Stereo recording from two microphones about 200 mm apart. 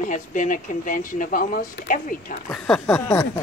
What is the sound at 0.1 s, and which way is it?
Speech, 40° left (ahead or behind).